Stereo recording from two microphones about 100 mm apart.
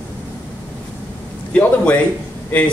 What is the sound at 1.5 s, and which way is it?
Speech, 15° left (ahead or behind).